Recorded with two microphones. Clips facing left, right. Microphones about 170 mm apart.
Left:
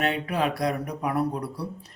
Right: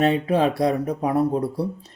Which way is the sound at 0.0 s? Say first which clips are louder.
Right 7 dB; 30° right (ahead or behind).